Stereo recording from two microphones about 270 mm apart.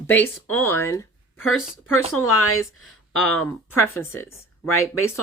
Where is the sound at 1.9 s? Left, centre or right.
Left.